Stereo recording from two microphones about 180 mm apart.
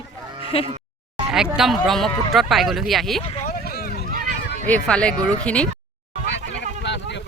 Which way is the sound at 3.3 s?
50° left (ahead or behind).